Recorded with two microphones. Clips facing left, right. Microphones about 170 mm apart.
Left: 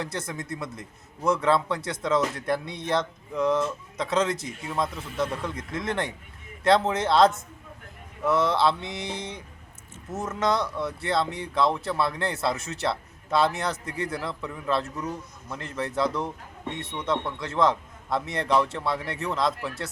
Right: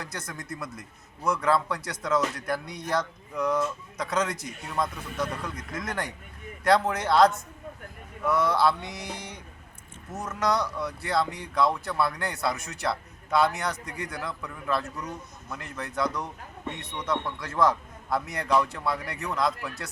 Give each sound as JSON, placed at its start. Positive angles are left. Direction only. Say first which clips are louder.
{"t": 0.0, "sound": "speech", "louder": "left 5 dB", "side_deg": 25}